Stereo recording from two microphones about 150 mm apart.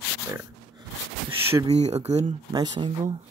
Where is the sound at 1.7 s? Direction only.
45° right (ahead or behind).